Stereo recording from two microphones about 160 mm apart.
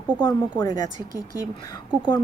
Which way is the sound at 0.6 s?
20° left (ahead or behind).